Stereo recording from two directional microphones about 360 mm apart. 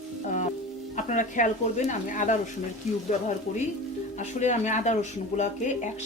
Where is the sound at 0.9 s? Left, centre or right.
Left.